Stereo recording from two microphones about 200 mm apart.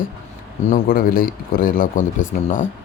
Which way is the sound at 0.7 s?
45° left (ahead or behind).